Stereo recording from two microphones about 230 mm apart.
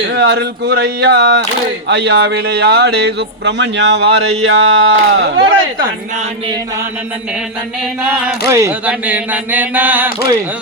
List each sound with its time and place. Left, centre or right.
0.1 s speech: right
8.4 s speech: centre